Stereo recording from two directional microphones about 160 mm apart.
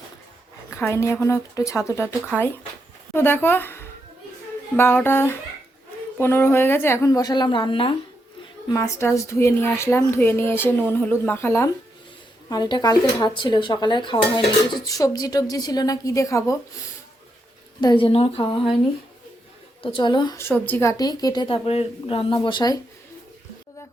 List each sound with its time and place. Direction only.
0.7 s speech: 15° left (ahead or behind); by 7.9 s 30° left (ahead or behind)
8.7 s speech: 15° left (ahead or behind)
12.5 s speech: 25° left (ahead or behind)
17.7 s speech: 30° left (ahead or behind)
19.8 s speech: 30° left (ahead or behind)
20.4 s speech: 10° left (ahead or behind)